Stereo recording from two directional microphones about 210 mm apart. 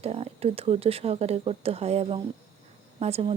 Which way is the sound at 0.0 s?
30° right (ahead or behind).